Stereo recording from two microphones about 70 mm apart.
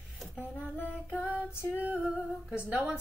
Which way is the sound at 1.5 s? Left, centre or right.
Left.